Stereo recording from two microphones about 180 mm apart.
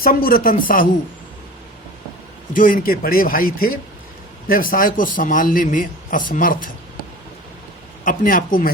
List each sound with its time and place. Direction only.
0.0 s a man's voice: 50° left (ahead or behind)
2.5 s a man's voice: 50° left (ahead or behind)
8.0 s a man's voice: 50° left (ahead or behind)